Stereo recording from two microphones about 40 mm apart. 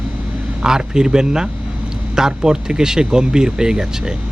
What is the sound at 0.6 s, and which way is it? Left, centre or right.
A man's voice, centre.